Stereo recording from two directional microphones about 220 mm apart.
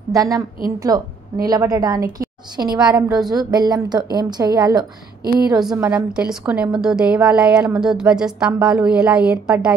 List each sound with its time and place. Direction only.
0.1 s a woman's voice: 15° right (ahead or behind)
2.1 s a sound: 20° right (ahead or behind)
2.9 s a woman's voice: 15° right (ahead or behind)
5.6 s a woman's voice: 5° right (ahead or behind)